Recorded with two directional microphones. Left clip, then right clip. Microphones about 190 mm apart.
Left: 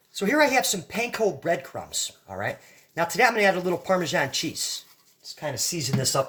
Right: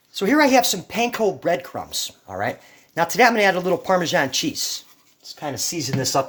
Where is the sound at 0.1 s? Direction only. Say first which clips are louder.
Right 4 dB; 45° right (ahead or behind).